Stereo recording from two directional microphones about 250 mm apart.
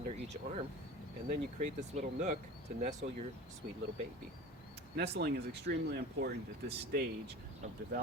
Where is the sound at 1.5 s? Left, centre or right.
Right.